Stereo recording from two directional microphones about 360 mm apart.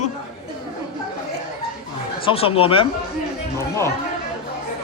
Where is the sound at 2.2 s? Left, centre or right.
Centre.